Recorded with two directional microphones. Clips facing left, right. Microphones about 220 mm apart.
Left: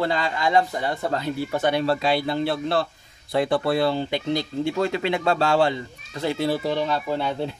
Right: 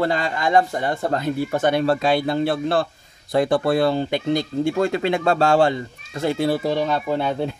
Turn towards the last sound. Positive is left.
turn(degrees=-50)  # may be behind; listen again after turning